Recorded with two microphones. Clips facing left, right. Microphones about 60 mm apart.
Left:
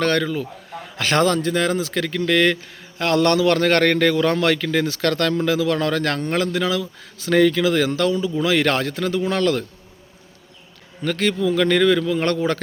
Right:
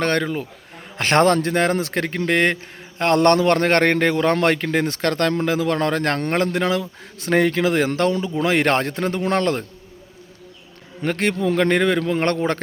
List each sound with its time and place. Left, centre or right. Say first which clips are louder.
0.0 s speech: left 1 dB; right
0.9 s speech: right 2 dB; right
6.1 s speech: right 1 dB; right
11.0 s speech: even; right